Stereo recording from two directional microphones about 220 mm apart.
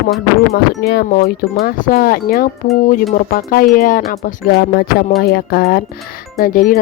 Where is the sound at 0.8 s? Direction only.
45° left (ahead or behind).